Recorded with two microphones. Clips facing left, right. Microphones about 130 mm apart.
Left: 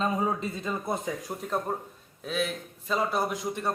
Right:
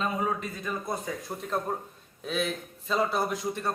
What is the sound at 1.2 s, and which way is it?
A man's voice, 5° left (ahead or behind).